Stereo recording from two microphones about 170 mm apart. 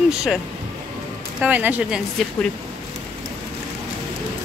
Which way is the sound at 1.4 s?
10° right (ahead or behind).